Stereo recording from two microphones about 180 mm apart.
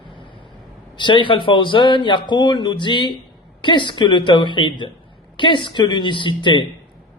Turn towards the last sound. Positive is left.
turn(degrees=25)  # may be behind; listen again after turning